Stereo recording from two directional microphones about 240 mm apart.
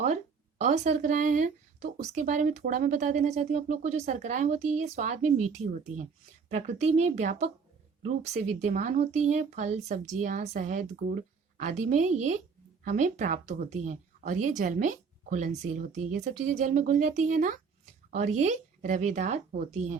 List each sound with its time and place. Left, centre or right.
0.6 s a woman's voice: right